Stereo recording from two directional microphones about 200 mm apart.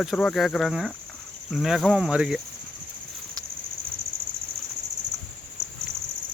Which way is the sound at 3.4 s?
20° right (ahead or behind).